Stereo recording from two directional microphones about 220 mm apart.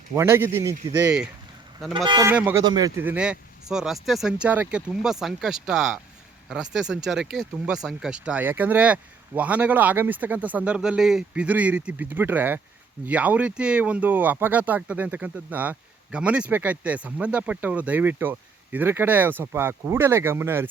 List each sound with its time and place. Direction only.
0.1 s speech: 10° right (ahead or behind)